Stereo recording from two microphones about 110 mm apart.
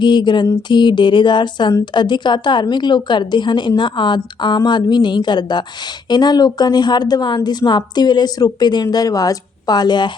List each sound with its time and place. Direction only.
0.0 s a woman's voice: 45° left (ahead or behind)